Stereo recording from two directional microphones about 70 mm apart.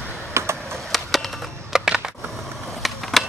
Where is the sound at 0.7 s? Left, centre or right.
Centre.